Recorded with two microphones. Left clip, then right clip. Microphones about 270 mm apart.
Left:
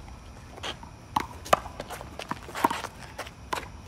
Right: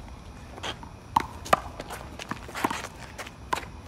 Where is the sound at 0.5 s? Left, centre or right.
Centre.